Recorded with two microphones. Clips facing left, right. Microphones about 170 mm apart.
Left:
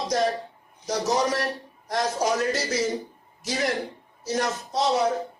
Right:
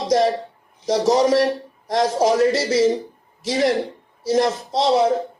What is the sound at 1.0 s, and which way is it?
A man's voice, 90° right.